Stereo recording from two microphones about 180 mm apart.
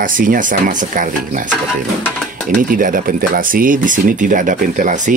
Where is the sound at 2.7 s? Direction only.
50° right (ahead or behind).